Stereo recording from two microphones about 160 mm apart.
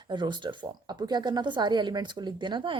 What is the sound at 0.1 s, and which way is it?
Speech, 30° right (ahead or behind).